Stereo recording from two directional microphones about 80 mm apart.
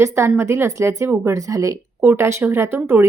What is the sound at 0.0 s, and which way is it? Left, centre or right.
Speech, right.